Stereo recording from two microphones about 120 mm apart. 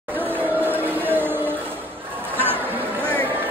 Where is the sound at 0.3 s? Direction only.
15° right (ahead or behind).